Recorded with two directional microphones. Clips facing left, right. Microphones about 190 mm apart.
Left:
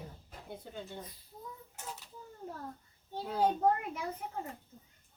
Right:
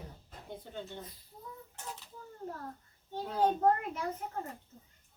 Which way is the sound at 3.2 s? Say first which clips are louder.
Right 1 dB; 10° left (ahead or behind).